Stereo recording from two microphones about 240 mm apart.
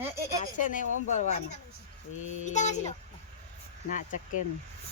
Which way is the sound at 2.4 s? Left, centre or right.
Left.